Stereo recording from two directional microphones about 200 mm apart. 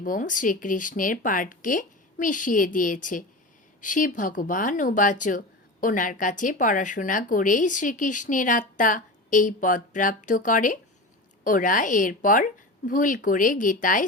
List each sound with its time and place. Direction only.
0.0 s speech: 40° left (ahead or behind)